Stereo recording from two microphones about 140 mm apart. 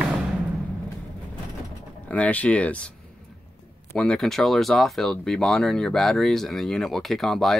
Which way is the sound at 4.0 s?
5° left (ahead or behind).